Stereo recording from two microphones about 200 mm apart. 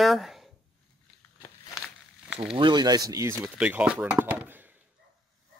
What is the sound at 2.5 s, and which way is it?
Speech, 20° right (ahead or behind).